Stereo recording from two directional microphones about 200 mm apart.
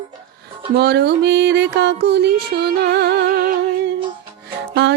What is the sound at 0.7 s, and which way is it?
Music, 55° right (ahead or behind).